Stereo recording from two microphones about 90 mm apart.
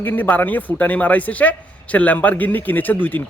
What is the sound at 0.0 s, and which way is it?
A man's voice, 20° left (ahead or behind).